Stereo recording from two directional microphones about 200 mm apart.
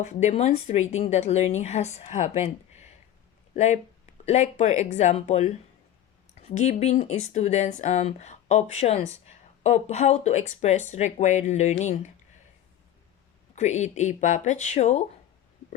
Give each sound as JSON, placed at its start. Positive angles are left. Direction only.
{"t": 0.0, "sound": "a woman's voice", "side_deg": 35}
{"t": 13.6, "sound": "a woman's voice", "side_deg": 35}